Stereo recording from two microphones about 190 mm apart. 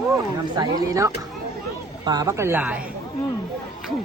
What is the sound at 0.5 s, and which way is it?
A woman's voice, 20° right (ahead or behind).